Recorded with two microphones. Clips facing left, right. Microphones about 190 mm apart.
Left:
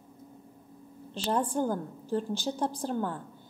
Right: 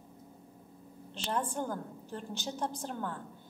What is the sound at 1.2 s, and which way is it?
A woman's voice, 35° left (ahead or behind).